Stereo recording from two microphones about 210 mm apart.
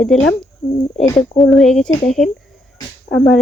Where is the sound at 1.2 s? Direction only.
Centre (ahead or behind).